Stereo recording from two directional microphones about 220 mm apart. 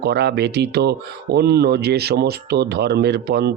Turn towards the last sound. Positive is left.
turn(degrees=-45)  # may be behind; listen again after turning